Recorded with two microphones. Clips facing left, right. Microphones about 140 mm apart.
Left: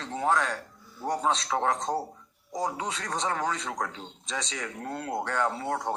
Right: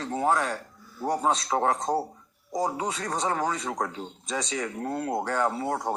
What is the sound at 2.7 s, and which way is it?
Speech, 45° right (ahead or behind).